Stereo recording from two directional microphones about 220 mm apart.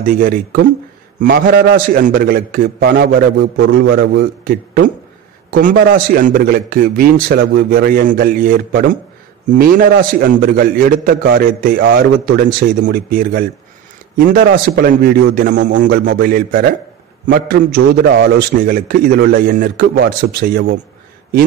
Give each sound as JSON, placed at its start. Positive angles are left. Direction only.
{"t": 0.0, "sound": "a man's voice", "side_deg": -40}